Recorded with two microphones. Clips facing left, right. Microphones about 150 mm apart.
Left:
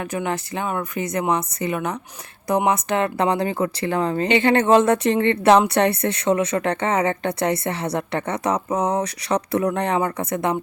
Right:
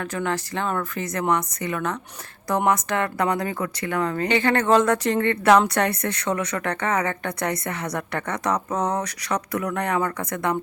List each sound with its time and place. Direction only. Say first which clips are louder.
0.0 s speech: left 1 dB; 20° left (ahead or behind)